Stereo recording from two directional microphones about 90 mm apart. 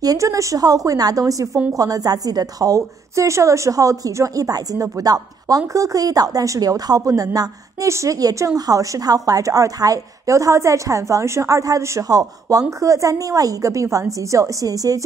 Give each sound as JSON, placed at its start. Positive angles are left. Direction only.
{"t": 0.0, "sound": "a woman's voice", "side_deg": -40}